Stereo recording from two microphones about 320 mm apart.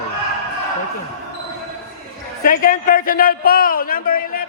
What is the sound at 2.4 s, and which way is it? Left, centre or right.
A man's voice, left.